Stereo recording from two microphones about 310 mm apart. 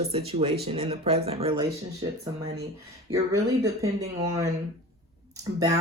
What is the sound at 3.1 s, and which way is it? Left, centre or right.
Speech, centre.